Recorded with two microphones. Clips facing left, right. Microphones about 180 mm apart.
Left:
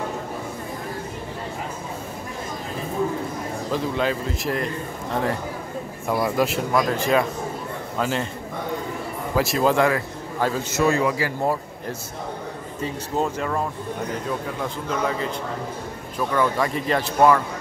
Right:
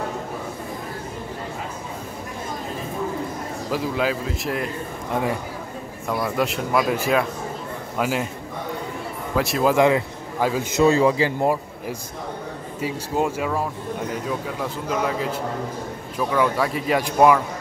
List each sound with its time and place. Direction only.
3.7 s speech: 5° right (ahead or behind)
6.2 s speech: centre (ahead or behind)
9.3 s speech: centre (ahead or behind)
9.8 s speech: 20° right (ahead or behind)
10.4 s speech: 10° right (ahead or behind)
10.8 s speech: 25° right (ahead or behind)
12.8 s speech: 10° right (ahead or behind)